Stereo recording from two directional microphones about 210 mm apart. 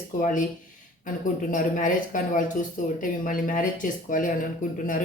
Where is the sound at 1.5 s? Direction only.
40° left (ahead or behind).